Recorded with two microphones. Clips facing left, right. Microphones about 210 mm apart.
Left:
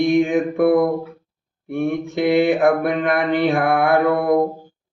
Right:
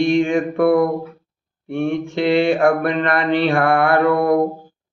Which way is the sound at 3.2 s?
15° left (ahead or behind).